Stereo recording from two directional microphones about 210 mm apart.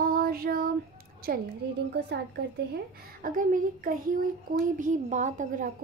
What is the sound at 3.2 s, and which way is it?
A child's voice, 40° right (ahead or behind).